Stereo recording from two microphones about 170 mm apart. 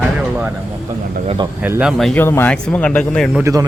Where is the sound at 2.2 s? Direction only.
15° left (ahead or behind).